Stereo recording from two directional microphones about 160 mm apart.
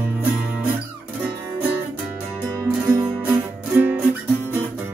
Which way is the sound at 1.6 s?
10° right (ahead or behind).